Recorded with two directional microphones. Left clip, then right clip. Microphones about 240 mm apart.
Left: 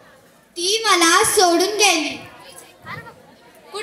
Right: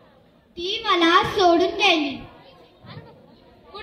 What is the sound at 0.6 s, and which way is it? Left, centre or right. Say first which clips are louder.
A child's voice: left 4 dB; right.